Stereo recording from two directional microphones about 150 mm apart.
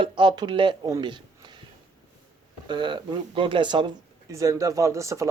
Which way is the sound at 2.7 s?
30° right (ahead or behind).